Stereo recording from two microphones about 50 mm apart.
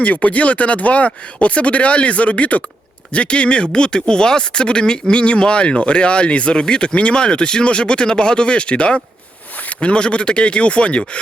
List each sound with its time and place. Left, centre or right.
0.0 s speech: left